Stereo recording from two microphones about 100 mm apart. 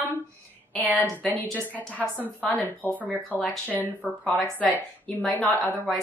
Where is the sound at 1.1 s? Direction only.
15° left (ahead or behind).